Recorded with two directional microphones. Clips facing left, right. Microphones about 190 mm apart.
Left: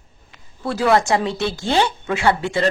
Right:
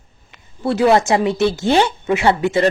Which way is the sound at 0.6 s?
25° right (ahead or behind).